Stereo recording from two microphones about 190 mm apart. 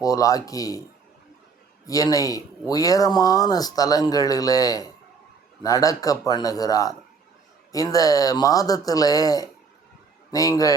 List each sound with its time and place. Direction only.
0.0 s speech: 20° left (ahead or behind)
1.9 s speech: 20° left (ahead or behind)